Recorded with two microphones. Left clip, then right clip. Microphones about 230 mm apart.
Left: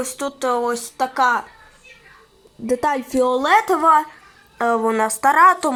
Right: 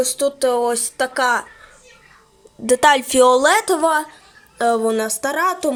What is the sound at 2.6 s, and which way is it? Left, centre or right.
Speech, right.